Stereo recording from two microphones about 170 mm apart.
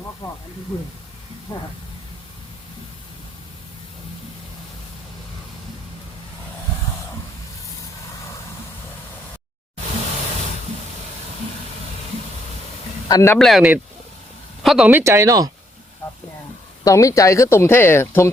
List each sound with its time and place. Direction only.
1.5 s speech: 20° left (ahead or behind)
13.1 s speech: 15° left (ahead or behind)
13.4 s speech: centre (ahead or behind); by 15.4 s 20° right (ahead or behind)
16.8 s speech: 20° left (ahead or behind)